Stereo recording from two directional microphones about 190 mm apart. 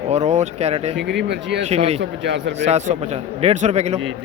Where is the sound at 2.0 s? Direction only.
70° right (ahead or behind).